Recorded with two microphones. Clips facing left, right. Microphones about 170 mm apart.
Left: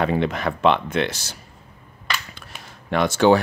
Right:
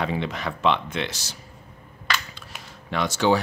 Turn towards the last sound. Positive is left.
turn(degrees=55)  # may be behind; listen again after turning